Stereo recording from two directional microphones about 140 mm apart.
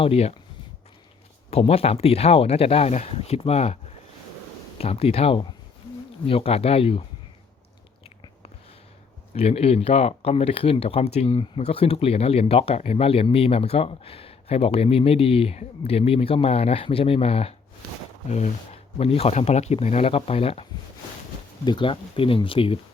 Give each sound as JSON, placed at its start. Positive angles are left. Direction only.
{"t": 0.0, "sound": "speech", "side_deg": 45}
{"t": 1.5, "sound": "speech", "side_deg": 45}
{"t": 4.8, "sound": "speech", "side_deg": 45}
{"t": 9.3, "sound": "speech", "side_deg": 45}
{"t": 21.6, "sound": "speech", "side_deg": 35}